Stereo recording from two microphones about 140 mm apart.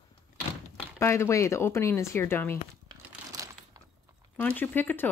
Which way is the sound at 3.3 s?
25° right (ahead or behind).